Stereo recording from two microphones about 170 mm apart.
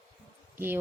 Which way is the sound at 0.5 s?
10° right (ahead or behind).